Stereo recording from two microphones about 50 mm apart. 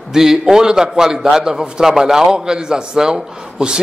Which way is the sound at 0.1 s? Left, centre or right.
Centre.